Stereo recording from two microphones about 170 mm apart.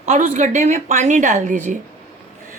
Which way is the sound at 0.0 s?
45° right (ahead or behind).